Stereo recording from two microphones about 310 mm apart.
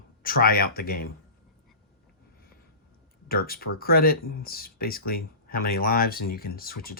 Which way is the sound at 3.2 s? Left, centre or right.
Left.